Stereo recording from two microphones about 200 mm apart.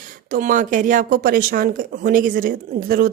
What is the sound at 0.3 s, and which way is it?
A woman's voice, 45° right (ahead or behind).